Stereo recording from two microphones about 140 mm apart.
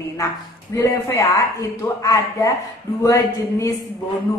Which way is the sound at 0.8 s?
20° left (ahead or behind).